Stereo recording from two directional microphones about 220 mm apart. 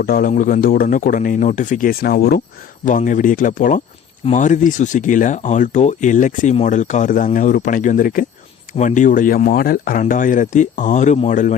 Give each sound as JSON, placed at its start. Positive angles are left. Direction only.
{"t": 0.0, "sound": "speech", "side_deg": 40}